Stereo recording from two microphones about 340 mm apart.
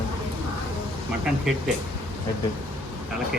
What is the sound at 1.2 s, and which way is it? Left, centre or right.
Speech, centre.